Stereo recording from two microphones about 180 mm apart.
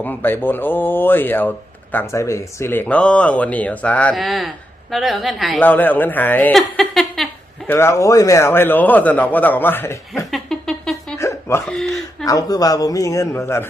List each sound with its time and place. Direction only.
0.0 s speech: 10° left (ahead or behind)
7.7 s speech: 15° left (ahead or behind)
10.3 s a sound: centre (ahead or behind)
11.2 s hiccup: 15° left (ahead or behind)
11.6 s speech: centre (ahead or behind)
12.2 s speech: 20° left (ahead or behind)